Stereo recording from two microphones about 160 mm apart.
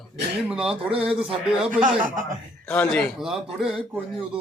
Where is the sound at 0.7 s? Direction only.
35° right (ahead or behind).